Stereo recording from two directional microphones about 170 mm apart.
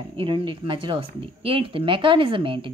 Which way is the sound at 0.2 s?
30° right (ahead or behind).